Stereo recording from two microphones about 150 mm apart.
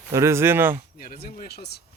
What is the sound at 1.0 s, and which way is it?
Speech, 80° left.